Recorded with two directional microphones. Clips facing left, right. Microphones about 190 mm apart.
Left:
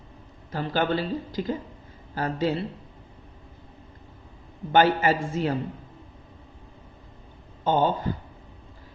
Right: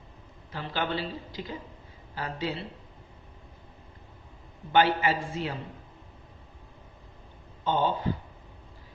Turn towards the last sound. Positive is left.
turn(degrees=45)  # may be behind; listen again after turning